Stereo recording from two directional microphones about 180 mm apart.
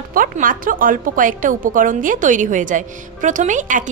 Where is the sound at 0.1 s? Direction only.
50° right (ahead or behind).